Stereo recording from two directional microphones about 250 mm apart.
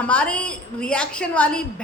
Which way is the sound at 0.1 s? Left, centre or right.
Centre.